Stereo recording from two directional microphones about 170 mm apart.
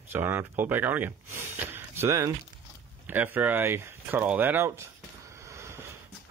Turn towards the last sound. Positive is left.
turn(degrees=-15)  # may be behind; listen again after turning